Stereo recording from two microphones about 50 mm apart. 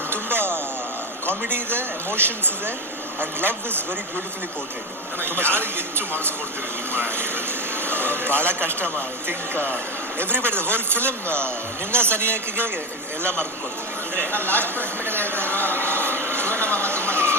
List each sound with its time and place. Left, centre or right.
0.1 s a sound: right
1.5 s a man's voice: right
5.4 s a man's voice: right
6.9 s a man's voice: right
14.3 s speech: right
16.2 s a sound: right